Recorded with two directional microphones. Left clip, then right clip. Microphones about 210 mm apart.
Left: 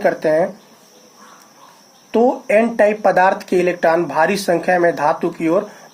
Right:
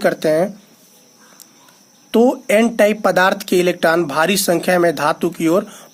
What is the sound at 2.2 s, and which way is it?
Speech, 55° right (ahead or behind).